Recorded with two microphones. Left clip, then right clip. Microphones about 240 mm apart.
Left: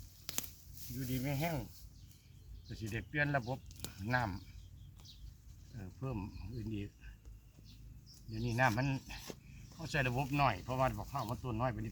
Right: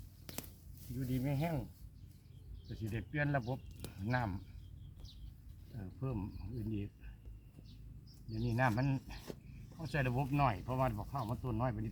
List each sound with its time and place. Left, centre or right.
0.3 s a sound: centre
0.9 s speech: centre
2.6 s speech: centre
5.7 s speech: centre
8.3 s speech: centre